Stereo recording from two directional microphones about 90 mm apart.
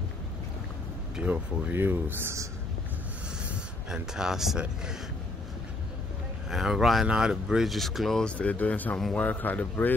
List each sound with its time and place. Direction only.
1.1 s speech: 15° right (ahead or behind)
3.4 s speech: 10° right (ahead or behind)
6.5 s speech: 5° right (ahead or behind)
8.3 s speech: 15° left (ahead or behind)